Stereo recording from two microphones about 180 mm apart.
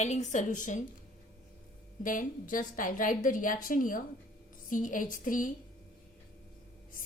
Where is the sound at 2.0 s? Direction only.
45° left (ahead or behind).